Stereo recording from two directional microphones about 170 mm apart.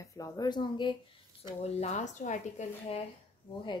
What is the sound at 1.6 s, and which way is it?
Speech, 40° left (ahead or behind).